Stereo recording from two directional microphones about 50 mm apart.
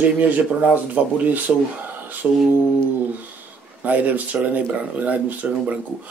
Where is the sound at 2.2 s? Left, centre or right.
Right.